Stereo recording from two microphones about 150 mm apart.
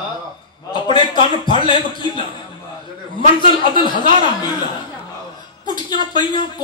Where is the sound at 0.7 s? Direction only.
30° left (ahead or behind).